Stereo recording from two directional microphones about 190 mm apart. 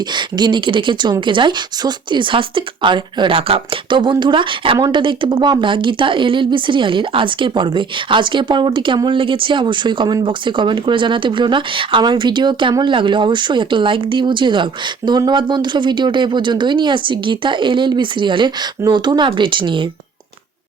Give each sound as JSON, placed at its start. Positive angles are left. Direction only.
{"t": 0.1, "sound": "speech", "side_deg": -25}